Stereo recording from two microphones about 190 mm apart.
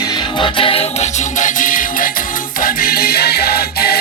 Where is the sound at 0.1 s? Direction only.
25° left (ahead or behind).